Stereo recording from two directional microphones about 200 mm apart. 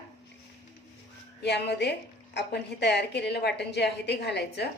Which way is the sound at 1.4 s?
55° left (ahead or behind).